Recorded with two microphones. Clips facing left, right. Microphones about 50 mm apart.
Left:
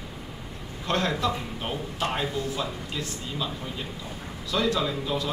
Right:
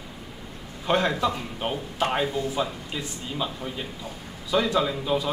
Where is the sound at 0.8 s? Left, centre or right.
Centre.